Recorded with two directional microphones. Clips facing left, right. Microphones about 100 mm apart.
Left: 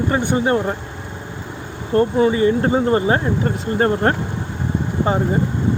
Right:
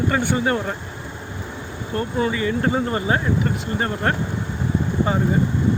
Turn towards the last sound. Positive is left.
turn(degrees=30)  # may be behind; listen again after turning